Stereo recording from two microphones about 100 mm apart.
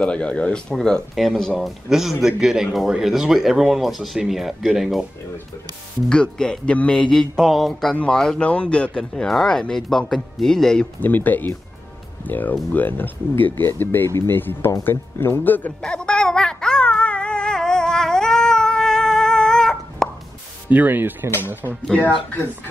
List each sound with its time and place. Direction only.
0.0 s speech: 10° left (ahead or behind)
6.0 s speech: 10° left (ahead or behind)
11.0 s speech: 15° left (ahead or behind)
15.8 s music: 10° left (ahead or behind)
20.7 s speech: 20° right (ahead or behind)